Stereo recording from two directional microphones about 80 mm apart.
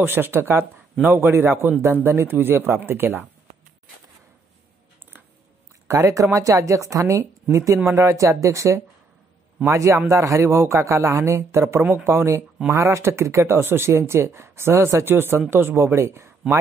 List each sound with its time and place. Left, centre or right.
0.0 s a man's voice: right
5.9 s a man's voice: right